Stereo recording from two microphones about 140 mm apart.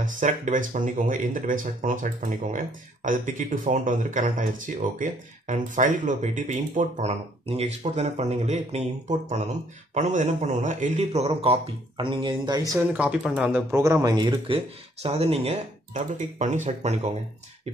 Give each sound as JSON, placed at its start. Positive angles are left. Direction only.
{"t": 0.0, "sound": "a man's voice", "side_deg": -65}
{"t": 12.9, "sound": "speech", "side_deg": -10}
{"t": 15.9, "sound": "speech", "side_deg": -60}